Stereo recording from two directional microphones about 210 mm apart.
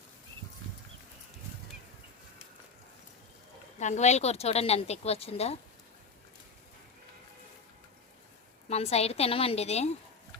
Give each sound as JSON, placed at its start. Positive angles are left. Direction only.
{"t": 3.8, "sound": "a woman's voice", "side_deg": 35}
{"t": 8.7, "sound": "a woman's voice", "side_deg": 30}